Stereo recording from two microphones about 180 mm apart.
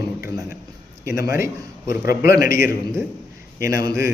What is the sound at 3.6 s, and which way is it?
Speech, 15° right (ahead or behind).